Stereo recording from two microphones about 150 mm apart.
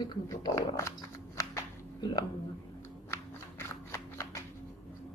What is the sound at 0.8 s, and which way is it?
Shuffling cards, 20° left (ahead or behind).